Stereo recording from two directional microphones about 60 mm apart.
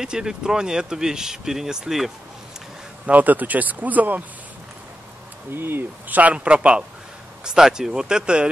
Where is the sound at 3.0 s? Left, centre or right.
Right.